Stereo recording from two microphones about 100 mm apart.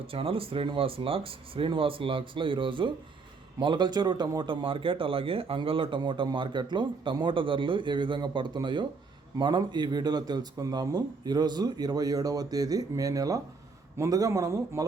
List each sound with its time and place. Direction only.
0.1 s a man's voice: 65° right (ahead or behind); by 4.3 s 45° right (ahead or behind)
4.4 s a man's voice: 60° right (ahead or behind); by 14.8 s 35° right (ahead or behind)